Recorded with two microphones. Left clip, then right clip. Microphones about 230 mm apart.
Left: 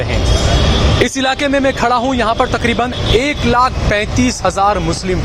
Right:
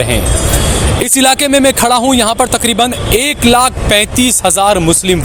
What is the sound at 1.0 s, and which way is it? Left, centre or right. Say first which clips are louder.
Speech: right 7 dB; right.